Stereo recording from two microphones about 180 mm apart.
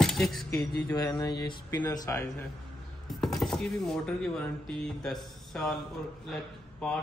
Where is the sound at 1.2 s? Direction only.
25° left (ahead or behind).